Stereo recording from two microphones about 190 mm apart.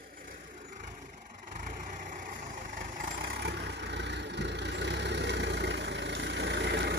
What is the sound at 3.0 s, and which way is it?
Vehicle, 60° right (ahead or behind).